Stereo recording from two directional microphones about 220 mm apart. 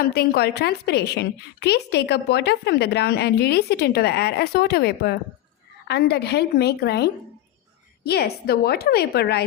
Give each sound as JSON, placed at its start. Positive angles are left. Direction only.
{"t": 0.0, "sound": "a woman's voice", "side_deg": 45}